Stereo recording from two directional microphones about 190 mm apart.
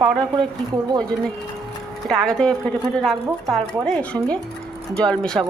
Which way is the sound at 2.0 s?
5° left (ahead or behind).